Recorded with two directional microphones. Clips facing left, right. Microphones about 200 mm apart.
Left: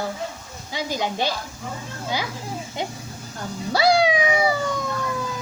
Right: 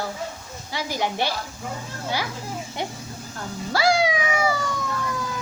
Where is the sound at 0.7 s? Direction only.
15° left (ahead or behind).